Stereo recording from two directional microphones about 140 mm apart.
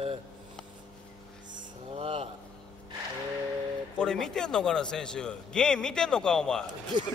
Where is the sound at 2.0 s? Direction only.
40° right (ahead or behind).